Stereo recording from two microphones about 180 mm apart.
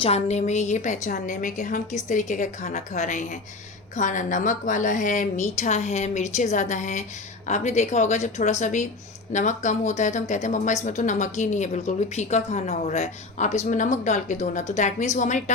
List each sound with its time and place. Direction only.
0.0 s a woman's voice: 35° left (ahead or behind)